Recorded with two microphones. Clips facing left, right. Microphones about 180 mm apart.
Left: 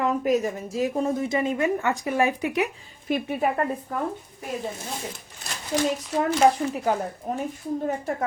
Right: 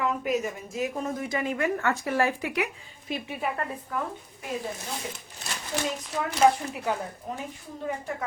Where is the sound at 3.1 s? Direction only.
50° left (ahead or behind).